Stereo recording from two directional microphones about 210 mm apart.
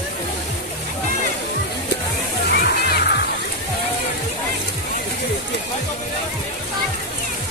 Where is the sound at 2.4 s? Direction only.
50° left (ahead or behind).